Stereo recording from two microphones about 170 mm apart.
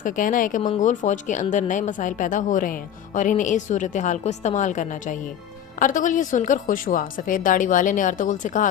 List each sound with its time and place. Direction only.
0.0 s a woman's voice: 50° left (ahead or behind)